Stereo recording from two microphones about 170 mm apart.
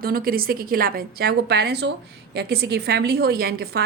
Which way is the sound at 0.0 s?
60° right (ahead or behind).